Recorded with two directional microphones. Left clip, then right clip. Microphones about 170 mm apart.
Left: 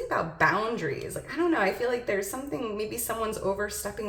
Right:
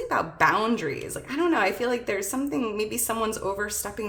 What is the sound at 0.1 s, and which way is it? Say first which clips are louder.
Speech: right 3 dB; 35° right (ahead or behind).